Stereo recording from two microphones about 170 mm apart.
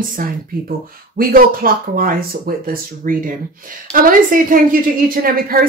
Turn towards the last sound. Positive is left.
turn(degrees=-60)  # may be behind; listen again after turning